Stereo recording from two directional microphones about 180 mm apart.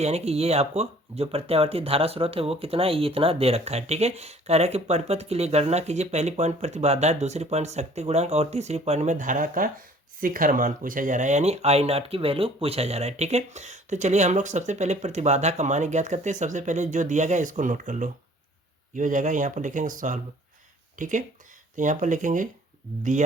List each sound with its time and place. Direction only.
0.0 s speech: 35° right (ahead or behind)